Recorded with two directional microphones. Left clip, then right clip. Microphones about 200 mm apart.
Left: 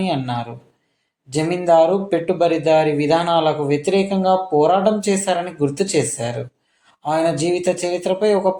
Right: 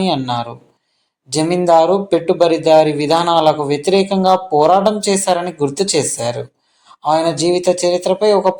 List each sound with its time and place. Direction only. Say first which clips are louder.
0.0 s speech: right 5 dB; 30° right (ahead or behind)